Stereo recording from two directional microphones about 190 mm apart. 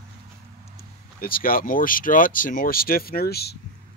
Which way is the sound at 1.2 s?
50° left (ahead or behind).